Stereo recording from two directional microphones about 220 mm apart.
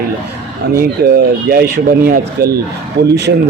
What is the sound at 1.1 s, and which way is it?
Speech, 45° right (ahead or behind).